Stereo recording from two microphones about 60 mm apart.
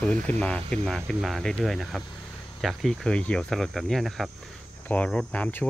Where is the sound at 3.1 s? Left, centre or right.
Centre.